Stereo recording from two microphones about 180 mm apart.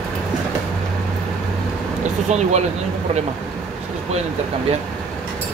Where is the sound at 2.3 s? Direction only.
40° right (ahead or behind).